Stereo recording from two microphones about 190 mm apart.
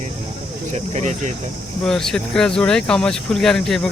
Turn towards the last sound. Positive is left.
turn(degrees=0)  # may be behind; listen again after turning